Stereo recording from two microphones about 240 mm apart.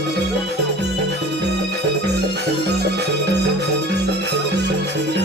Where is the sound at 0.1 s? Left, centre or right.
Right.